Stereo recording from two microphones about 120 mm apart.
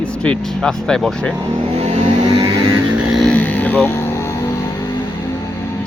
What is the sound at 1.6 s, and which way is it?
Vehicle, 60° right (ahead or behind).